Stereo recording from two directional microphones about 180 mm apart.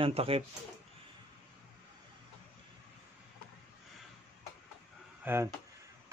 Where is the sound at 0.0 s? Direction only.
30° right (ahead or behind).